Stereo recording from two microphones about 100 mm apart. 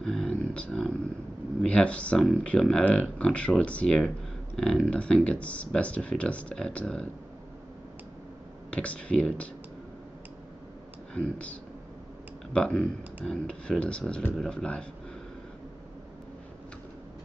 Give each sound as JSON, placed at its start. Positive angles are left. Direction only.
{"t": 0.0, "sound": "a sound", "side_deg": 5}
{"t": 1.6, "sound": "speech", "side_deg": 10}
{"t": 8.6, "sound": "speech", "side_deg": 10}
{"t": 11.1, "sound": "speech", "side_deg": 10}
{"t": 12.5, "sound": "speech", "side_deg": 10}